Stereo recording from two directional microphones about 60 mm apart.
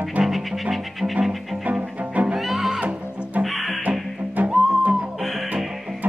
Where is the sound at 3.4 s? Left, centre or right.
Centre.